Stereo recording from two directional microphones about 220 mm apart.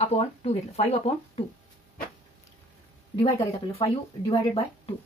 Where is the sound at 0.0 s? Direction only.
30° left (ahead or behind).